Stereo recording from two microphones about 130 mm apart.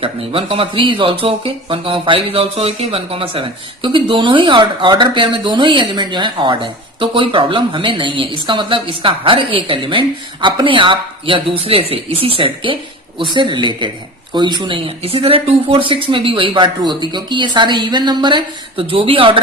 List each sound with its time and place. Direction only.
0.0 s speech: 45° right (ahead or behind)